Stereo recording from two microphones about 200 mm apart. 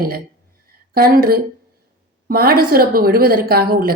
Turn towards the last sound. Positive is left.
turn(degrees=-50)  # may be behind; listen again after turning